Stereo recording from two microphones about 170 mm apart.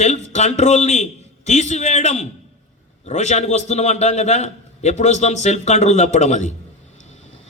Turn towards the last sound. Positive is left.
turn(degrees=45)  # may be behind; listen again after turning